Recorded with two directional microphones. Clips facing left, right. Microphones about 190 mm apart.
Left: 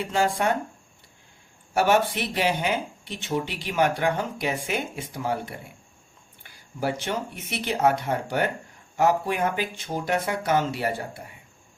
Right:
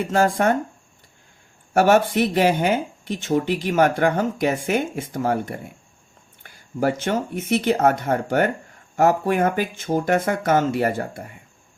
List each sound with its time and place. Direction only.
0.1 s speech: 45° right (ahead or behind)
1.7 s speech: 45° right (ahead or behind)